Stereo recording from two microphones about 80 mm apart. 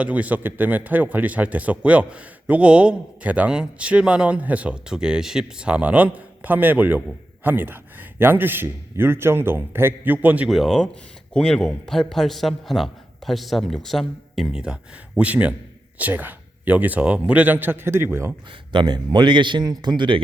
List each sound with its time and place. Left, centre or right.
0.0 s a man's voice: centre
10.5 s a man's voice: centre
14.3 s a man's voice: centre; by 18.3 s right
18.7 s speech: right